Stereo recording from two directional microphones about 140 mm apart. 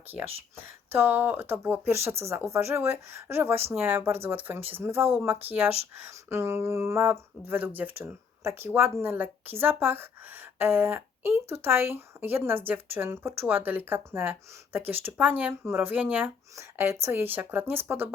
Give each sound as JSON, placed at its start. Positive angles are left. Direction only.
{"t": 0.9, "sound": "speech", "side_deg": -15}